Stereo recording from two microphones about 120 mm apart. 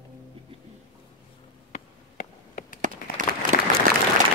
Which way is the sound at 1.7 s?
90° left.